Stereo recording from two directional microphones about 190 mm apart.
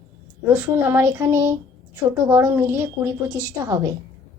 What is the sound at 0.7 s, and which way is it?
A woman's voice, 10° right (ahead or behind).